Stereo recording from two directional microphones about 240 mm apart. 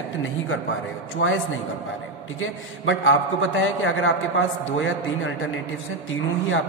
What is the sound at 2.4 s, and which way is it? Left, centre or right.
A man's voice, left.